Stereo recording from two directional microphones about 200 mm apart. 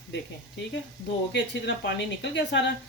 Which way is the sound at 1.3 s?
60° left (ahead or behind).